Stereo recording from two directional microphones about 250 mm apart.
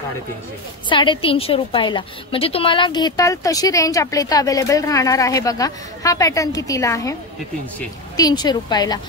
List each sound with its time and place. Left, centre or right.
0.8 s a woman's voice: centre
8.2 s a woman's voice: centre